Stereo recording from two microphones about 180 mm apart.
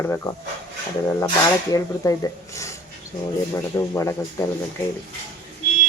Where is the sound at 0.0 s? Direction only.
15° left (ahead or behind).